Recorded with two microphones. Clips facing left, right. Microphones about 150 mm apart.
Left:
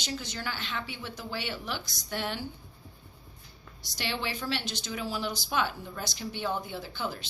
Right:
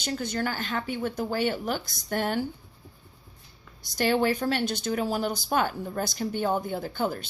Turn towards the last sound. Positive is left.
turn(degrees=-50)  # may be behind; listen again after turning